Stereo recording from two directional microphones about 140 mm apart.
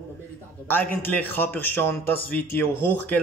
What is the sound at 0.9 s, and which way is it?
A man's voice, 15° left (ahead or behind).